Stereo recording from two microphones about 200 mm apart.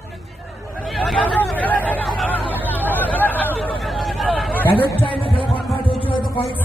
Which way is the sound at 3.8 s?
Centre (ahead or behind).